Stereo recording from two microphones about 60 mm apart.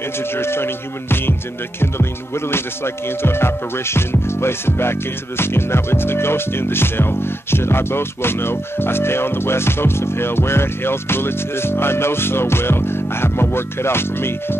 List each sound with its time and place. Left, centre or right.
0.4 s music: left
1.8 s speech: left
5.4 s music: left